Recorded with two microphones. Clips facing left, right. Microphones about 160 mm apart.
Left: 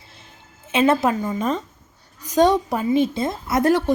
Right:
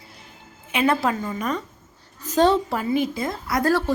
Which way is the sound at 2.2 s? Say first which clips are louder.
Left 2 dB; 15° left (ahead or behind).